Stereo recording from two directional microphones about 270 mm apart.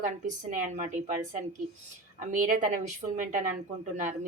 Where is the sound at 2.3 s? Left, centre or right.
Right.